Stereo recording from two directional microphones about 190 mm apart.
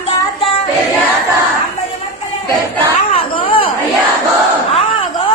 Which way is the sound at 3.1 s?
30° left (ahead or behind).